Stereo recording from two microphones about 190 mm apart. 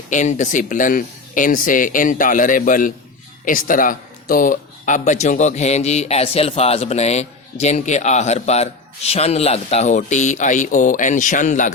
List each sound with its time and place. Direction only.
0.1 s speech: 40° left (ahead or behind)